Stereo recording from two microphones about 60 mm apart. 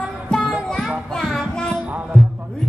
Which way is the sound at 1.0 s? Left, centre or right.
Centre.